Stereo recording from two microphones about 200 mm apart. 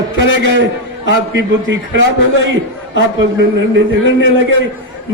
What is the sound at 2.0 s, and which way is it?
Speech, 70° right (ahead or behind).